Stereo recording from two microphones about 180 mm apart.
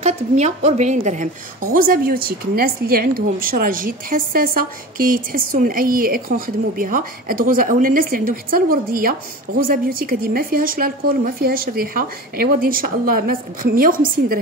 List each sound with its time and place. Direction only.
0.0 s a woman's voice: 40° right (ahead or behind)